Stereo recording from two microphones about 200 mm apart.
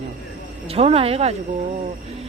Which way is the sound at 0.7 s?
30° right (ahead or behind).